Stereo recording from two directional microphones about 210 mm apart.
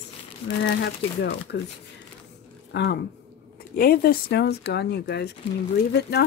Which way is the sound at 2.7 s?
50° left (ahead or behind).